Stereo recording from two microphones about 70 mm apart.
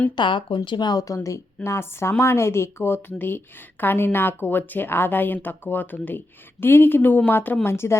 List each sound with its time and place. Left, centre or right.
0.2 s speech: left
1.0 s speech: left